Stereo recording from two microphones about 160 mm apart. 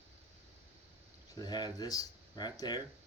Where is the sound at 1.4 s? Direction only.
25° left (ahead or behind).